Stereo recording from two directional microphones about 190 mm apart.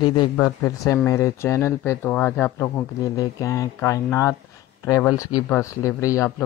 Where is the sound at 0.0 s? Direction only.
25° left (ahead or behind).